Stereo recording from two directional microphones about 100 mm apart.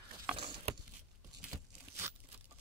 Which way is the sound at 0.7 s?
75° right (ahead or behind).